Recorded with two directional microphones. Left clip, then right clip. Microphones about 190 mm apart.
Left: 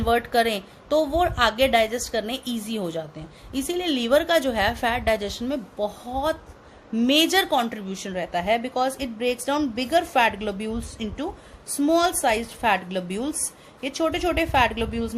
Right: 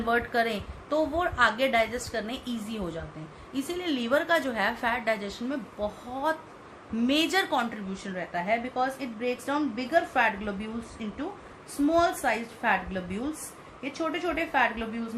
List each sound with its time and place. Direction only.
0.0 s a woman's voice: 50° left (ahead or behind)